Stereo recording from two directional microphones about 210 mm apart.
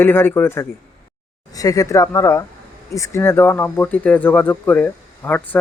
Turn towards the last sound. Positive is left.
turn(degrees=10)  # may be behind; listen again after turning